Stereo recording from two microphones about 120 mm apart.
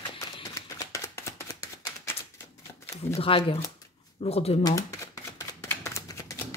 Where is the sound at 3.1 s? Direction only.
50° left (ahead or behind).